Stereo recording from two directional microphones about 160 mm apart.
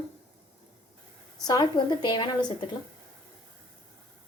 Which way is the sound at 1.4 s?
25° left (ahead or behind).